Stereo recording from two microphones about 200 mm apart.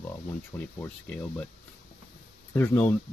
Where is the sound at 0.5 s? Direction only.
15° left (ahead or behind).